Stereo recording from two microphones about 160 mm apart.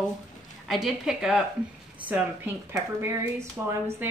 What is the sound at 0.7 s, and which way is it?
A woman's voice, centre (ahead or behind).